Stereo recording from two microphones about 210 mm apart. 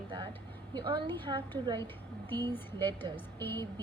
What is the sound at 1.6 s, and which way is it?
Speech, 20° right (ahead or behind).